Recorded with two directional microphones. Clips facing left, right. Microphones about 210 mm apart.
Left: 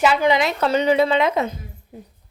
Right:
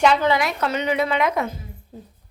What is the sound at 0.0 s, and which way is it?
A woman's voice, 10° left (ahead or behind).